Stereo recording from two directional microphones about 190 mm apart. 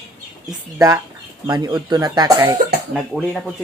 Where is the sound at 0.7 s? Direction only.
15° right (ahead or behind).